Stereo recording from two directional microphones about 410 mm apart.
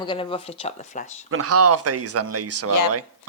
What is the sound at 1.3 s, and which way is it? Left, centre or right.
Speech, right.